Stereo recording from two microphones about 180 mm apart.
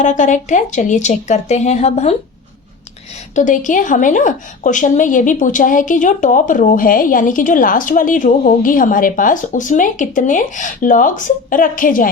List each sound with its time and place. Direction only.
0.0 s a woman's voice: 40° left (ahead or behind)
3.3 s a woman's voice: 45° left (ahead or behind)